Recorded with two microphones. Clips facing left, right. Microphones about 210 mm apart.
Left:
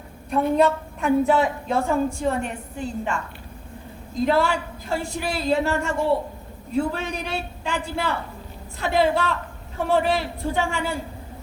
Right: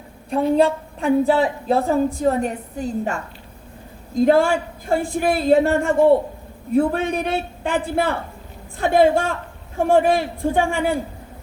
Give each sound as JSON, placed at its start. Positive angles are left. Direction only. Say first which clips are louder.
{"t": 0.3, "sound": "a woman's voice", "louder": "right 2 dB", "side_deg": -30}
{"t": 4.1, "sound": "a man's voice", "louder": "right 6 dB", "side_deg": -50}